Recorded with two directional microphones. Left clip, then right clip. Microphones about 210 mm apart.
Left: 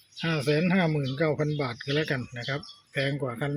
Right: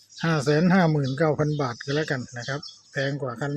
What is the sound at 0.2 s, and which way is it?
Speech, 10° right (ahead or behind).